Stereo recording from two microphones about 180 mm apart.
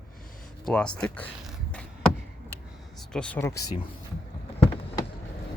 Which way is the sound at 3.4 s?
15° left (ahead or behind).